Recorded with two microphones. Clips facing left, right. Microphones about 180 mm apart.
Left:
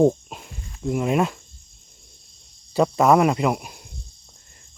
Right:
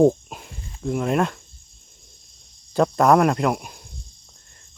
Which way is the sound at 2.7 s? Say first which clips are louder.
Even; 5° left (ahead or behind).